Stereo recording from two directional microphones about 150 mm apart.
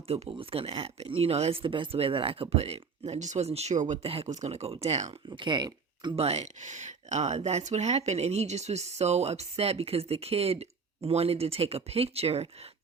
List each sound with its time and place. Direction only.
0.1 s speech: 40° right (ahead or behind)
4.0 s speech: 40° right (ahead or behind)
5.4 s speech: 30° right (ahead or behind)
6.1 s speech: 45° right (ahead or behind)